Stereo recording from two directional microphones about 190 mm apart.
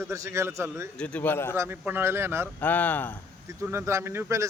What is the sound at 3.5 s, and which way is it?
Speech, 15° right (ahead or behind).